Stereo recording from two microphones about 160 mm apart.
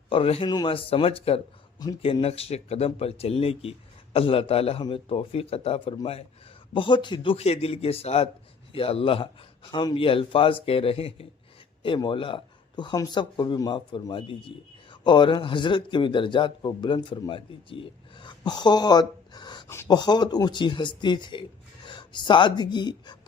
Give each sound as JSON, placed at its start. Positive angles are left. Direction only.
{"t": 0.1, "sound": "speech", "side_deg": 35}